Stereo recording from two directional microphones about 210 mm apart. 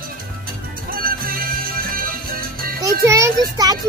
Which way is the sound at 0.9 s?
45° right (ahead or behind).